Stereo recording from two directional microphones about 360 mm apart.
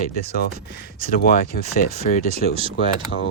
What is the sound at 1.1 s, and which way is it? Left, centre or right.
Speech, left.